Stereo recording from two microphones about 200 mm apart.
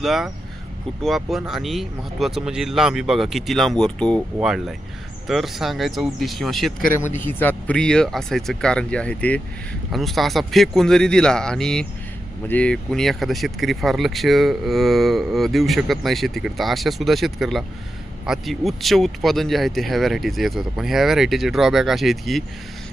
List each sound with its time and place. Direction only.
0.0 s speech: centre (ahead or behind)